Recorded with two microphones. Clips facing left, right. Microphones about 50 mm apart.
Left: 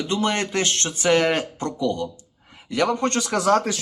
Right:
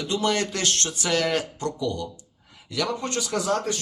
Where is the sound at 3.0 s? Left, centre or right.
Left.